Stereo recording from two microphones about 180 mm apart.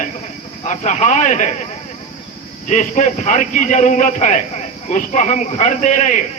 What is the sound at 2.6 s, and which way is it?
A man's voice, 40° left (ahead or behind).